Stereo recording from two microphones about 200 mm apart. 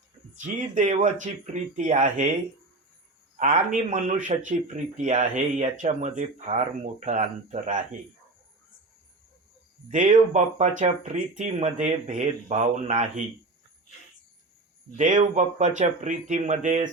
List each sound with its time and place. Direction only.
0.3 s speech: 40° right (ahead or behind)
3.3 s speech: 40° right (ahead or behind)
9.9 s speech: 40° right (ahead or behind)
15.2 s speech: 35° right (ahead or behind)